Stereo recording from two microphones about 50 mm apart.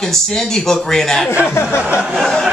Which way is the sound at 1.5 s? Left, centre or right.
Left.